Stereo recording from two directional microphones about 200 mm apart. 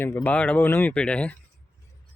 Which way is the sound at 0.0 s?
10° left (ahead or behind).